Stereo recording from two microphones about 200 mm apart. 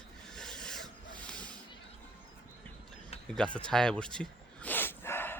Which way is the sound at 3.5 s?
5° left (ahead or behind).